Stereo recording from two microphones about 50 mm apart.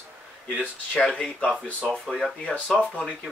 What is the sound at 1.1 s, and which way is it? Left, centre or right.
Speech, left.